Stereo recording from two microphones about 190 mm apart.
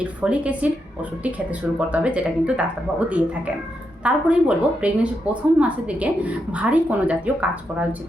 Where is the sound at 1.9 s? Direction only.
5° right (ahead or behind).